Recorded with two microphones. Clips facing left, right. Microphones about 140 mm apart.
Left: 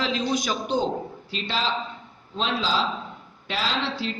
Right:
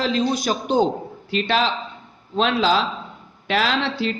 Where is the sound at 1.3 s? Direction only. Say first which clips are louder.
Right 8 dB; 65° right (ahead or behind).